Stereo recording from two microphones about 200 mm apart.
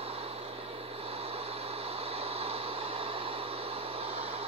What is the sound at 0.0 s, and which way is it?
Vehicle, 30° right (ahead or behind).